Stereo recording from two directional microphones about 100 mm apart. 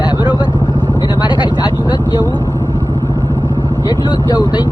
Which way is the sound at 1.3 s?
45° left (ahead or behind).